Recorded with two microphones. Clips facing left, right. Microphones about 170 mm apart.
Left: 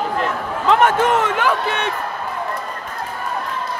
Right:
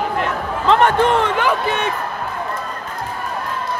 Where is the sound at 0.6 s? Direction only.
5° left (ahead or behind).